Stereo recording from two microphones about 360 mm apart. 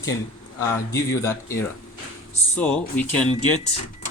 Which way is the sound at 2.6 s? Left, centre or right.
Centre.